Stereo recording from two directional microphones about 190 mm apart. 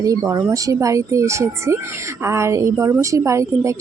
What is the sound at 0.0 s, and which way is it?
A woman's voice, 15° right (ahead or behind).